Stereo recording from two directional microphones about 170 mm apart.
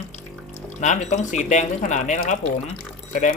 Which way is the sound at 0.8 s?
45° left (ahead or behind).